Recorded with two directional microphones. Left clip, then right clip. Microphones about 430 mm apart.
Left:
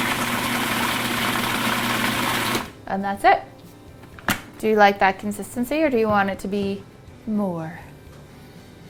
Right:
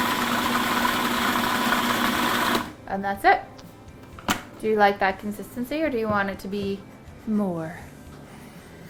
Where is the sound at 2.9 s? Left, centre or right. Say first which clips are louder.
Left 2 dB; left.